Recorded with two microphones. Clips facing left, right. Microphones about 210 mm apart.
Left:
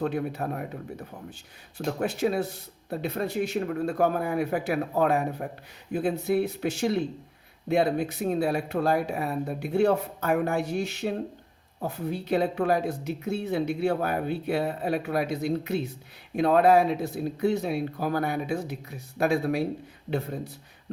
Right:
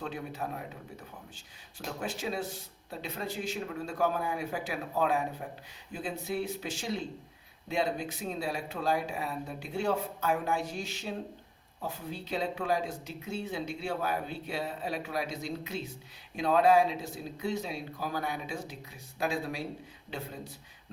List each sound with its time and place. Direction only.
0.0 s speech: 60° left (ahead or behind)
1.9 s speech: 60° left (ahead or behind)